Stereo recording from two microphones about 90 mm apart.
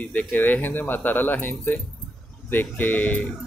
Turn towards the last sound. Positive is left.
turn(degrees=20)  # may be behind; listen again after turning